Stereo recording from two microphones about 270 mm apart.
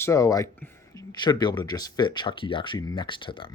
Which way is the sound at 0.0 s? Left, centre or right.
Centre.